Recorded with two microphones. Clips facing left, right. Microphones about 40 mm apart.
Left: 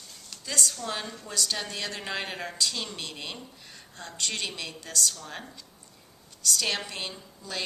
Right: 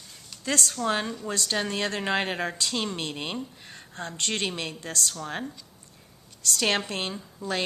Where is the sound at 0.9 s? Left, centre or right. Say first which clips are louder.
Right 7 dB; right.